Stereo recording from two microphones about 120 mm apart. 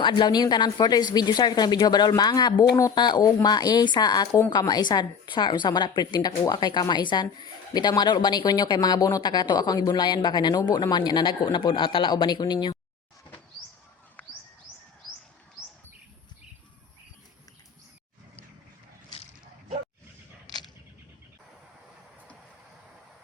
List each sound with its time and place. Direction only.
0.0 s a woman's voice: 40° left (ahead or behind)
14.2 s bird: 15° left (ahead or behind)